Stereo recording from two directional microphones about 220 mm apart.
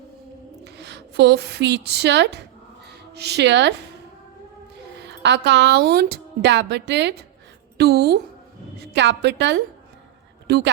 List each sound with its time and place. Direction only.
0.6 s a woman's voice: 50° right (ahead or behind)
4.9 s speech: 50° right (ahead or behind)